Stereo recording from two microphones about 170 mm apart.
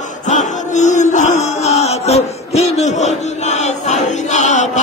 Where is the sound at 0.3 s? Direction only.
45° left (ahead or behind).